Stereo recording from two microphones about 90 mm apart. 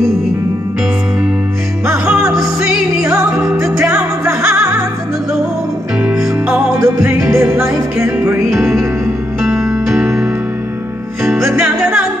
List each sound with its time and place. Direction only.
1.9 s music: 10° right (ahead or behind)
3.4 s music: 5° right (ahead or behind)
4.2 s music: 20° right (ahead or behind)
6.0 s music: 15° right (ahead or behind)
9.4 s music: 5° right (ahead or behind)
11.2 s music: 5° right (ahead or behind)